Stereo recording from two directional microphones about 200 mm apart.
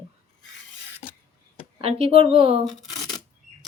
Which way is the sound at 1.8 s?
30° right (ahead or behind).